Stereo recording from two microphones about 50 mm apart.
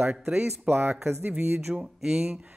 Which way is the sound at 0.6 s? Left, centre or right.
Right.